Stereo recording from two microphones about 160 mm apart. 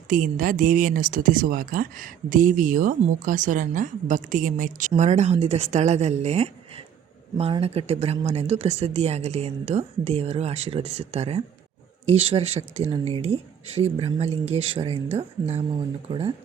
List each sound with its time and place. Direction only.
0.1 s a woman's voice: 60° right (ahead or behind); by 15.6 s 40° right (ahead or behind)